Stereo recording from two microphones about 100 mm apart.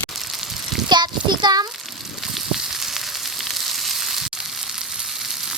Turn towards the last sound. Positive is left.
turn(degrees=-5)  # may be behind; listen again after turning